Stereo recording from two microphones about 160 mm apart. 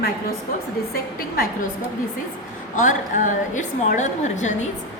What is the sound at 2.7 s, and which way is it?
A woman's voice, 50° left (ahead or behind).